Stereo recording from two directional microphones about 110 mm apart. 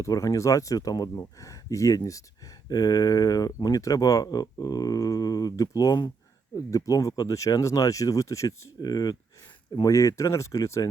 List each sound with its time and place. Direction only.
0.0 s speech: 30° left (ahead or behind)